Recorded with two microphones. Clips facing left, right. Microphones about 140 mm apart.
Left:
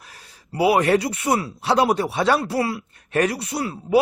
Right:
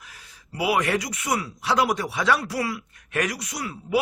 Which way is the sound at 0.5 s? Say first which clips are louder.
Left 6 dB; 30° left (ahead or behind).